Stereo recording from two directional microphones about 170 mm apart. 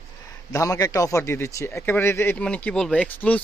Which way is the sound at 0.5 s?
20° left (ahead or behind).